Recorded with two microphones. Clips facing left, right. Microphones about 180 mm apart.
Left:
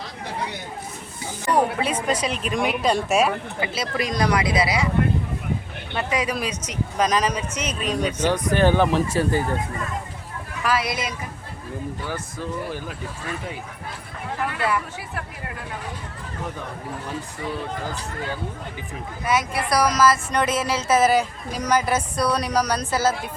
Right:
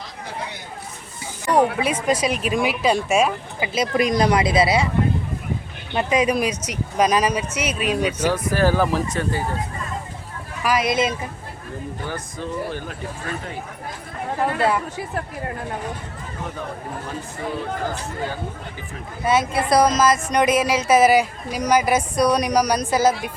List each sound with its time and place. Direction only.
1.5 s speech: 10° right (ahead or behind)
3.6 s speech: 20° right (ahead or behind)
5.9 s speech: 20° right (ahead or behind); by 9.0 s centre (ahead or behind)
10.6 s speech: 15° right (ahead or behind)
14.4 s speech: 30° right (ahead or behind)
19.2 s speech: 25° right (ahead or behind)